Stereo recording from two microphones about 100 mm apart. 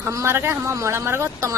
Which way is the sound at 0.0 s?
25° right (ahead or behind).